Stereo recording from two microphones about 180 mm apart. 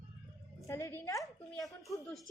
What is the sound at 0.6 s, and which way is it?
A woman's voice, 15° left (ahead or behind).